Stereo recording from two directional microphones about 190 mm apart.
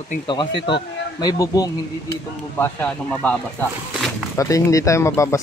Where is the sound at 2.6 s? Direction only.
5° left (ahead or behind).